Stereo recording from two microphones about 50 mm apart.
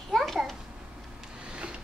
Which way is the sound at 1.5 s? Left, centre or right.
Right.